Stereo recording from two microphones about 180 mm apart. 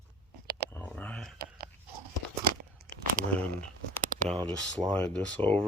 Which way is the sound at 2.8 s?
55° right (ahead or behind).